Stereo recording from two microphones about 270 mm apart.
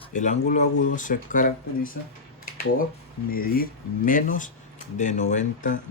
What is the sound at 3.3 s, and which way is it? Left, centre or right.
Speech, left.